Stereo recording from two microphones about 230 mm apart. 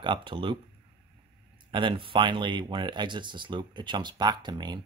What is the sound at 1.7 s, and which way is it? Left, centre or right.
Speech, right.